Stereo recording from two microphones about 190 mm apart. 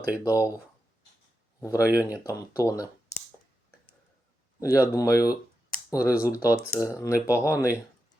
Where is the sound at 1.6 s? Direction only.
15° left (ahead or behind).